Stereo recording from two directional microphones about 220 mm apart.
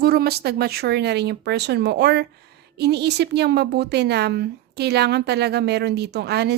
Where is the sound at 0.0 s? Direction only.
45° right (ahead or behind).